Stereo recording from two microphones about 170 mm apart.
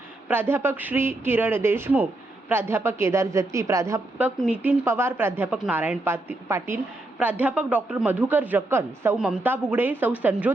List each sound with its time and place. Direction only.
0.3 s a woman's voice: 10° right (ahead or behind)
4.4 s a woman's voice: 5° right (ahead or behind)